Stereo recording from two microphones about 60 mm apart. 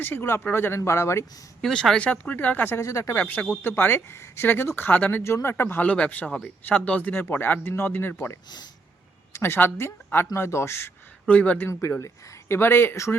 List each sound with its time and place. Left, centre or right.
0.0 s speech: left
0.9 s a man's voice: left
1.7 s speech: centre
2.7 s a man's voice: left
3.2 s speech: left
4.9 s speech: left
5.2 s speech: left
5.8 s a woman's voice: left
11.3 s speech: left
11.7 s speech: left
12.5 s speech: left